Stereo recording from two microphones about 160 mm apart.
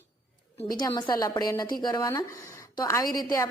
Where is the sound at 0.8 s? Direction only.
25° left (ahead or behind).